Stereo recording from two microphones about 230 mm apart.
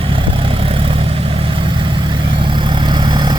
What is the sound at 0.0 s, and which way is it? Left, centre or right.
Vehicle, right.